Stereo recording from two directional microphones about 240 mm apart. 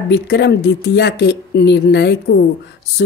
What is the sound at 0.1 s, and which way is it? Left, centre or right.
Speech, left.